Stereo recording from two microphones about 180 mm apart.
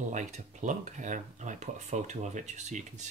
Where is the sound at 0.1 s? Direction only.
45° right (ahead or behind).